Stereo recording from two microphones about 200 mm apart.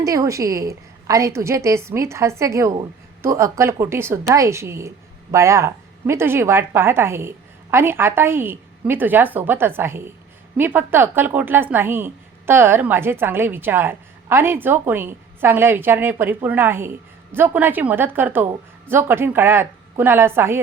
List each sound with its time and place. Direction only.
0.0 s a woman's voice: 15° right (ahead or behind)